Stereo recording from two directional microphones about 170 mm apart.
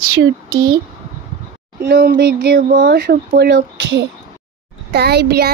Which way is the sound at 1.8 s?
65° right (ahead or behind).